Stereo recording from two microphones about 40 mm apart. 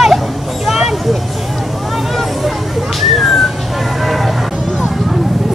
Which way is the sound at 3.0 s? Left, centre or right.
Centre.